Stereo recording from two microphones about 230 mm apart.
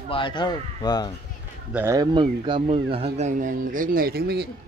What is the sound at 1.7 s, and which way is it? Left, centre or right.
Speech, centre.